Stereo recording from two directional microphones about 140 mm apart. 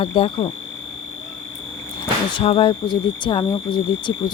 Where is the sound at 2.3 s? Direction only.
40° left (ahead or behind).